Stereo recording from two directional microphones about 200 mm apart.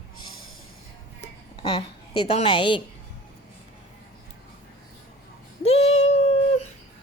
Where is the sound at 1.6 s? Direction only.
30° left (ahead or behind).